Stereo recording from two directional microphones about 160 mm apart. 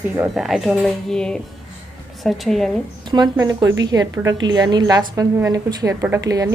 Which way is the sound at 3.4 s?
25° right (ahead or behind).